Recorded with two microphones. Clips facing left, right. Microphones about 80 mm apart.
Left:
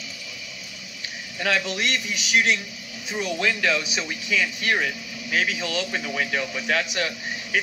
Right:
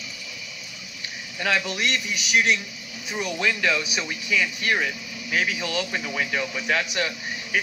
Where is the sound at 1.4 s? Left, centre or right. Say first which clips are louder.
Even; right.